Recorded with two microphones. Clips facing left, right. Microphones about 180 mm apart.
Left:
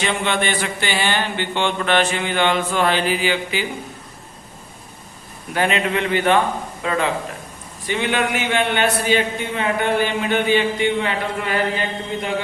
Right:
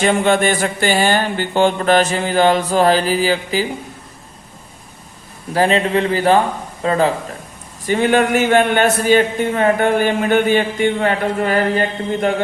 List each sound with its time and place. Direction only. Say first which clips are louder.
0.0 s speech: right 7 dB; 45° right (ahead or behind)
5.5 s a man's voice: right 5 dB; 35° right (ahead or behind)